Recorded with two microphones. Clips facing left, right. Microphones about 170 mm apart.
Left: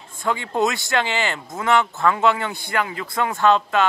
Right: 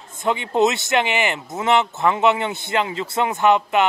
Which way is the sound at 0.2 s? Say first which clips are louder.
Right 3 dB; 20° right (ahead or behind).